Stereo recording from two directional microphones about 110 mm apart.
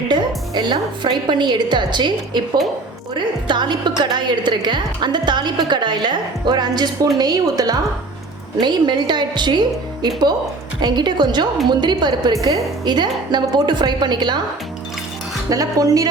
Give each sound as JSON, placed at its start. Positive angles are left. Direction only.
{"t": 0.1, "sound": "a woman's voice", "side_deg": -45}
{"t": 15.4, "sound": "a woman's voice", "side_deg": -30}